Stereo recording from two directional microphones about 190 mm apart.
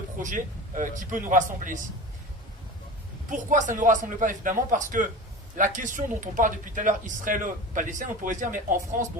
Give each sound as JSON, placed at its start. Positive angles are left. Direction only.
{"t": 0.2, "sound": "speech", "side_deg": -45}
{"t": 3.2, "sound": "speech", "side_deg": -45}